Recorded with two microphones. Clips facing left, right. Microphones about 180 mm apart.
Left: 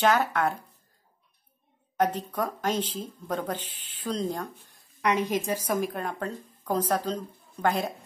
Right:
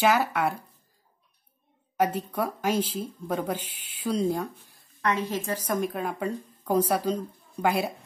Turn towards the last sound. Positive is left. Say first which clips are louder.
# right 1 dB
turn(degrees=-10)  # may be behind; listen again after turning